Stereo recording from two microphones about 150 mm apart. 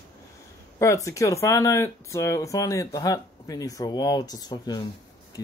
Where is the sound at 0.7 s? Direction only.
20° left (ahead or behind).